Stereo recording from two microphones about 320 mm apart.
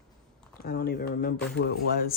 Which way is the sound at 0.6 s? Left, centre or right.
Left.